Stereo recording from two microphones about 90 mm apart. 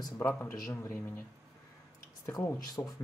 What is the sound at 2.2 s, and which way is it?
Speech, 45° left (ahead or behind).